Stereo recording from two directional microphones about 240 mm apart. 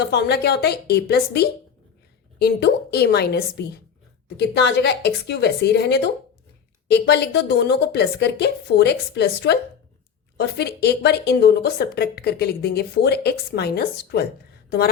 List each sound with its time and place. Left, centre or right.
0.0 s a woman's voice: left